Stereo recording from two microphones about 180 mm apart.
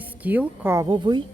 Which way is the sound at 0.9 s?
25° right (ahead or behind).